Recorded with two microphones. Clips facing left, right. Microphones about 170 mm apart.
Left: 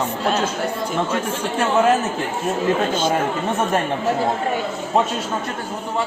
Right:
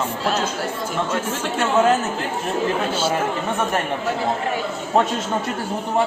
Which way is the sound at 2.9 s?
5° right (ahead or behind).